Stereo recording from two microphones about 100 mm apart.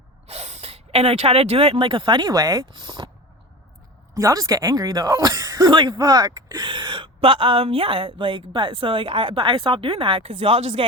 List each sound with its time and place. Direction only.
0.3 s speech: 90° right; by 3.1 s 45° right (ahead or behind)
4.1 s speech: 35° right (ahead or behind); by 10.8 s 65° right (ahead or behind)